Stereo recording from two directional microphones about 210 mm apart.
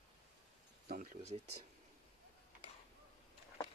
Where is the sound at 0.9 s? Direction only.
40° right (ahead or behind).